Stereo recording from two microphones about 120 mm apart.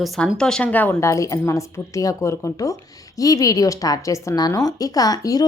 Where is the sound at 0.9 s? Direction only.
25° left (ahead or behind).